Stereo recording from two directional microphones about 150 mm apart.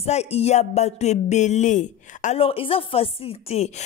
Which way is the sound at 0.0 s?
45° left (ahead or behind).